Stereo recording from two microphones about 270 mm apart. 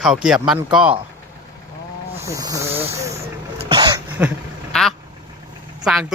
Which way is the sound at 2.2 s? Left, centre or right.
Centre.